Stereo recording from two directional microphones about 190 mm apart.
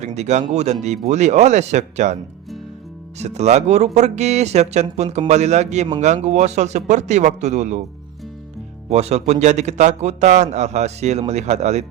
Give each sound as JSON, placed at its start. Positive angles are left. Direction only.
{"t": 0.0, "sound": "a man's voice", "side_deg": -35}
{"t": 3.2, "sound": "a man's voice", "side_deg": -35}
{"t": 8.9, "sound": "a man's voice", "side_deg": -35}